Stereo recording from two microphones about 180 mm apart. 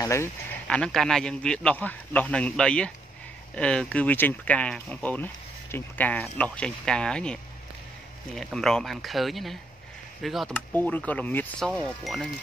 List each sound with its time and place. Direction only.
0.0 s speech: 15° left (ahead or behind)
0.7 s speech: 5° left (ahead or behind)
8.4 s speech: centre (ahead or behind)